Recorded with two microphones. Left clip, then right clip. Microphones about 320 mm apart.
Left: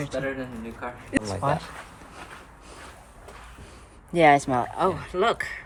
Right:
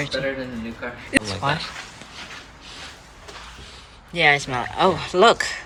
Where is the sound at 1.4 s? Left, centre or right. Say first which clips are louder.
Right 2 dB; centre.